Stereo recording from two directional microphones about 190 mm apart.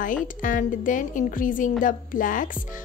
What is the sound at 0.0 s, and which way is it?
A woman's voice, 45° left (ahead or behind).